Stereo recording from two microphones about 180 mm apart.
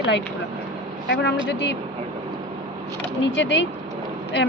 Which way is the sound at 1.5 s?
70° left (ahead or behind).